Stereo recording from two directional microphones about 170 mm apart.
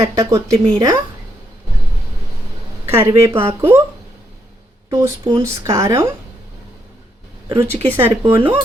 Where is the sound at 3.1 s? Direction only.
15° right (ahead or behind).